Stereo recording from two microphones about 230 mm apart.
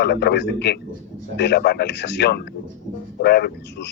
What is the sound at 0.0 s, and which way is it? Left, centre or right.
Speech, left.